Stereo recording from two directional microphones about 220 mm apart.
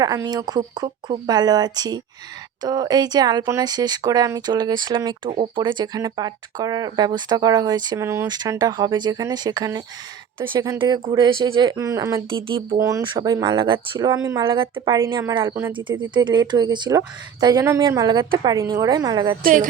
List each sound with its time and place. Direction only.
0.0 s speech: 15° right (ahead or behind)
19.4 s a woman's voice: 40° right (ahead or behind)